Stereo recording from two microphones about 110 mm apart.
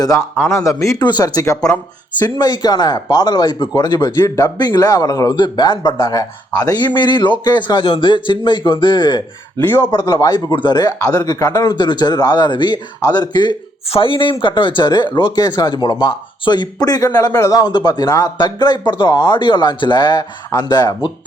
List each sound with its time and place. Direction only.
0.4 s speech: 25° left (ahead or behind)
1.0 s speech: 40° left (ahead or behind)
4.2 s speech: 25° left (ahead or behind)
4.5 s speech: 40° left (ahead or behind)
5.4 s speech: 45° left (ahead or behind)
9.6 s speech: 20° left (ahead or behind)
9.9 s speech: 40° left (ahead or behind)
13.9 s speech: 50° left (ahead or behind)